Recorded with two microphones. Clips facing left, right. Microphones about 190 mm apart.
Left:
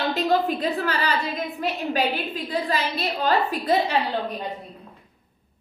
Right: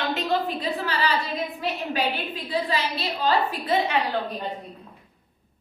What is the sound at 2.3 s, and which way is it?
A woman's voice, 45° left (ahead or behind).